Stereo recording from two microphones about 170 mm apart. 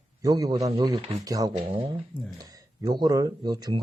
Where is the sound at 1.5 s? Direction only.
30° right (ahead or behind).